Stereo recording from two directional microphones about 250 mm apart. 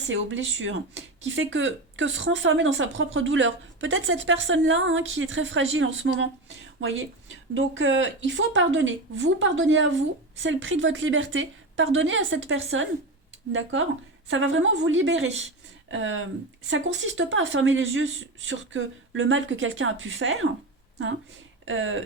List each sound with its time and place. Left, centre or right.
0.0 s speech: right
21.6 s speech: right